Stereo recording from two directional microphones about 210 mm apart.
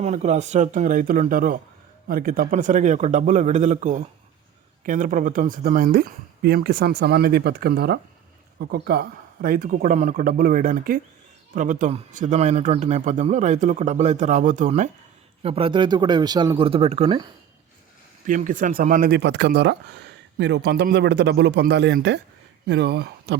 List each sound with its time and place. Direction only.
0.0 s a man's voice: 35° right (ahead or behind)
18.3 s speech: 40° right (ahead or behind)